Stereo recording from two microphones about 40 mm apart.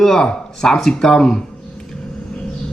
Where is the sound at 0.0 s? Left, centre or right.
Centre.